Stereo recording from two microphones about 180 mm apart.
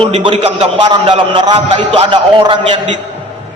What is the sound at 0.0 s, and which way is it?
A man's voice, 30° right (ahead or behind).